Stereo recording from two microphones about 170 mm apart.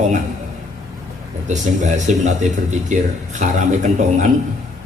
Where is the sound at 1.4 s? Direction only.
45° right (ahead or behind).